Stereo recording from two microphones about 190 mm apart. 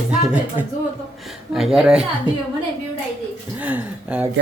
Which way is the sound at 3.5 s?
10° right (ahead or behind).